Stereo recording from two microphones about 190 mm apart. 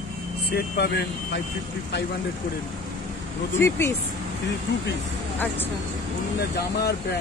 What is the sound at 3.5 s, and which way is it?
Speech, 15° left (ahead or behind).